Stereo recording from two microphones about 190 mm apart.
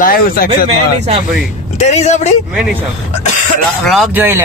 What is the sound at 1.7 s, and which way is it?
Speech, 35° left (ahead or behind).